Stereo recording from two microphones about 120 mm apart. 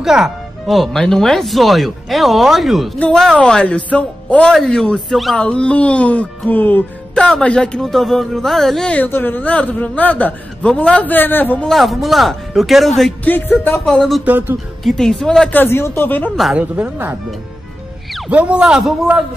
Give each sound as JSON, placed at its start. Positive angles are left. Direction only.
{"t": 0.0, "sound": "speech", "side_deg": -5}
{"t": 3.0, "sound": "music", "side_deg": 5}
{"t": 11.7, "sound": "speech", "side_deg": 0}
{"t": 13.2, "sound": "music", "side_deg": 15}
{"t": 14.2, "sound": "a man's voice", "side_deg": -15}
{"t": 14.8, "sound": "speech", "side_deg": 5}
{"t": 15.6, "sound": "music", "side_deg": 20}
{"t": 16.5, "sound": "a man's voice", "side_deg": -15}
{"t": 18.3, "sound": "a man's voice", "side_deg": -10}